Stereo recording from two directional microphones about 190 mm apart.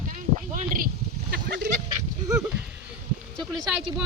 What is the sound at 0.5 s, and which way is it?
Speech, 45° right (ahead or behind).